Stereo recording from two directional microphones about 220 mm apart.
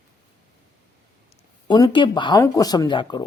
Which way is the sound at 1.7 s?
20° left (ahead or behind).